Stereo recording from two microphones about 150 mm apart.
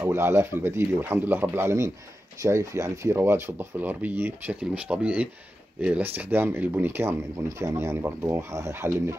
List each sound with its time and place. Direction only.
0.0 s speech: 15° right (ahead or behind)